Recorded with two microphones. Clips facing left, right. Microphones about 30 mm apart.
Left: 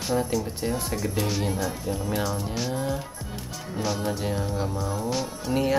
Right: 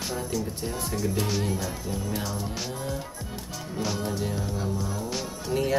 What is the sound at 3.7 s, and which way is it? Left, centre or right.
Speech, centre.